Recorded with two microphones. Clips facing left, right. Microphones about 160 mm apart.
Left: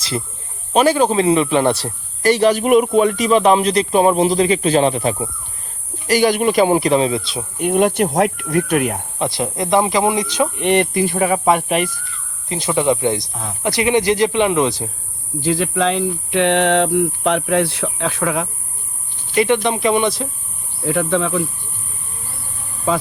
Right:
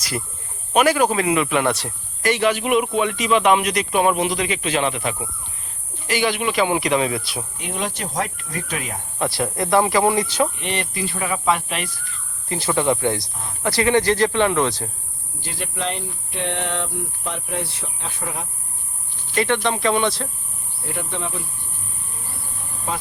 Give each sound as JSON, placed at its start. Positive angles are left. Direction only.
{"t": 0.7, "sound": "a man's voice", "side_deg": 30}
{"t": 7.6, "sound": "speech", "side_deg": 55}
{"t": 9.1, "sound": "speech", "side_deg": 20}
{"t": 10.6, "sound": "speech", "side_deg": 55}
{"t": 12.5, "sound": "speech", "side_deg": 20}
{"t": 15.7, "sound": "speech", "side_deg": 90}
{"t": 19.3, "sound": "speech", "side_deg": 15}
{"t": 21.0, "sound": "speech", "side_deg": 90}